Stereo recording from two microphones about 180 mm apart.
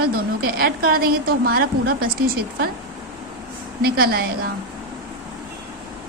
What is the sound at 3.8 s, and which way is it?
Speech, 55° right (ahead or behind).